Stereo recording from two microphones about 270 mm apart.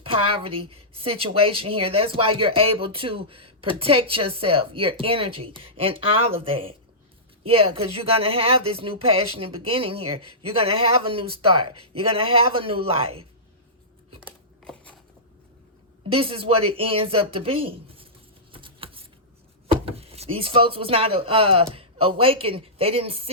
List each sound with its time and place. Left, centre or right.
0.0 s a woman's voice: centre
14.3 s scissors: centre
16.0 s speech: right
18.5 s a sound: centre
19.6 s speech: right